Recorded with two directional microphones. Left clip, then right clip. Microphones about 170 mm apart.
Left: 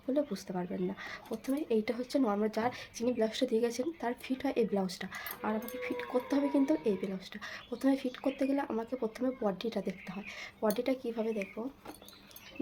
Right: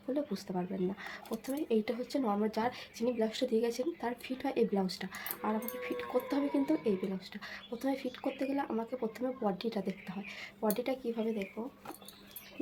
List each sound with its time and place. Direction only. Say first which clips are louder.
0.1 s speech: left 3 dB; 20° left (ahead or behind)